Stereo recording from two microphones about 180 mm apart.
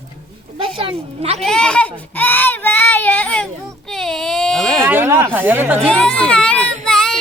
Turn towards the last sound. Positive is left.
turn(degrees=5)  # may be behind; listen again after turning